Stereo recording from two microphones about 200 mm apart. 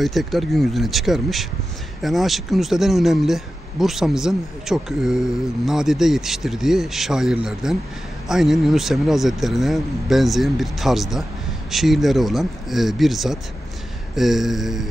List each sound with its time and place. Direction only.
0.0 s speech: centre (ahead or behind)